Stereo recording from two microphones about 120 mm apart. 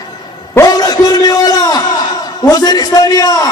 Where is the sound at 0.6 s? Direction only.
30° left (ahead or behind).